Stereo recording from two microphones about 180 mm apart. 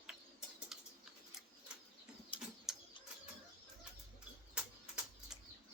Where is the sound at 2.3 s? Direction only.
30° left (ahead or behind).